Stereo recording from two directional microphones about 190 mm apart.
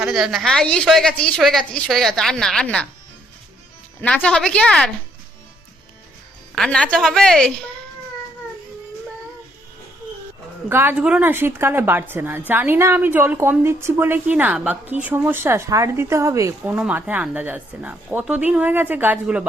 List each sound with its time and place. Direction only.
0.0 s a woman's voice: centre (ahead or behind)
4.0 s a woman's voice: 5° left (ahead or behind)
6.6 s a woman's voice: 5° left (ahead or behind)
10.7 s speech: 10° right (ahead or behind)